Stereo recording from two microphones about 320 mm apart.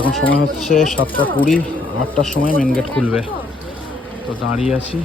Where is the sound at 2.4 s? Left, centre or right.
Left.